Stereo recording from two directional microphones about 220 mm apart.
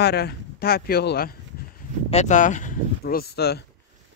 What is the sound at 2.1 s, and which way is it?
Speech, 30° left (ahead or behind).